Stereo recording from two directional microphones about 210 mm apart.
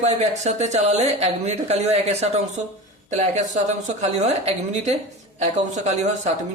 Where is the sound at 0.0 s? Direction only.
35° right (ahead or behind).